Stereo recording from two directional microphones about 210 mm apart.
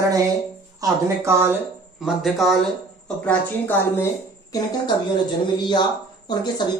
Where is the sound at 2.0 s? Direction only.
Centre (ahead or behind).